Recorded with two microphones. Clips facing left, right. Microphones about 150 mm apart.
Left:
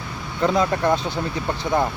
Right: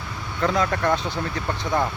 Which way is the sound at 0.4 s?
20° left (ahead or behind).